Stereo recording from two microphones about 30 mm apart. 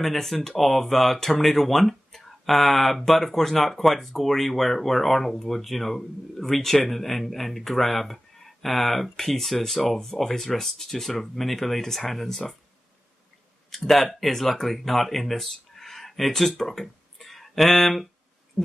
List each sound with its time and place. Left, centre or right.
0.0 s speech: centre
13.7 s a sound: centre
13.9 s speech: centre
16.8 s tick-tock: centre